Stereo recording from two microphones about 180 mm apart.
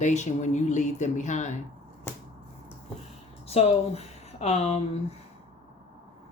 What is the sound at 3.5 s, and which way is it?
Speech, 35° left (ahead or behind).